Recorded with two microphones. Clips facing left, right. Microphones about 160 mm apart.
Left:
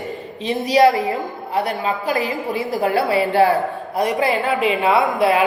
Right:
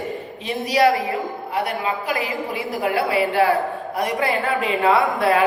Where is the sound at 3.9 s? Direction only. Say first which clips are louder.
Left 4 dB; 20° left (ahead or behind).